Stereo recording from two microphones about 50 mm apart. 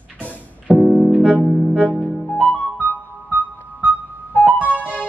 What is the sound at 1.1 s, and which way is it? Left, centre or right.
Music, centre.